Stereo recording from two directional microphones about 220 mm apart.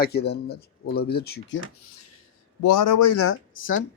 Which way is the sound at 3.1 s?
75° left (ahead or behind).